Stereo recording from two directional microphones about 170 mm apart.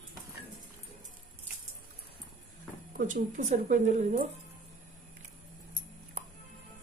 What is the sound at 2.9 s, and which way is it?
Speech, 50° right (ahead or behind).